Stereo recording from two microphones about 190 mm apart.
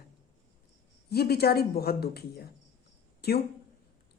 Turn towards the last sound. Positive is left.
turn(degrees=55)  # may be behind; listen again after turning